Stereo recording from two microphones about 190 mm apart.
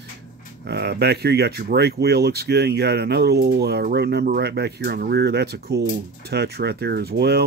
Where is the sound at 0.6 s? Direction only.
60° right (ahead or behind).